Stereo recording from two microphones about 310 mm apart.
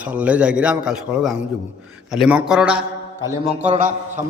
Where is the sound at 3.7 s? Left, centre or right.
Right.